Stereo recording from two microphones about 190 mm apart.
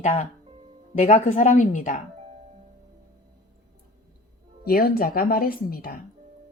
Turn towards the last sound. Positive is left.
turn(degrees=50)  # may be behind; listen again after turning